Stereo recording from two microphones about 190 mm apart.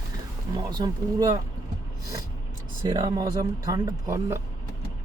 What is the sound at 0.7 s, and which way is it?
Speech, 20° right (ahead or behind).